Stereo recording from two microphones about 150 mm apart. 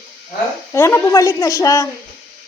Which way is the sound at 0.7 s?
20° left (ahead or behind).